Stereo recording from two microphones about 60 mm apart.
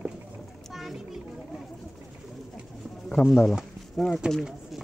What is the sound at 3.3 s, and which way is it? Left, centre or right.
Speech, centre.